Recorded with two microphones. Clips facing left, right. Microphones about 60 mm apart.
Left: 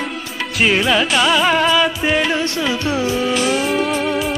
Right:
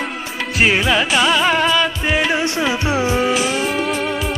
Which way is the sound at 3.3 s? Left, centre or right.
Centre.